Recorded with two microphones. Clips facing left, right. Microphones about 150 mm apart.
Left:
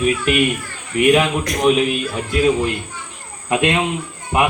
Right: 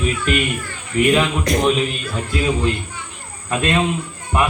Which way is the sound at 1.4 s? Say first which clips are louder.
Right 1 dB; 30° right (ahead or behind).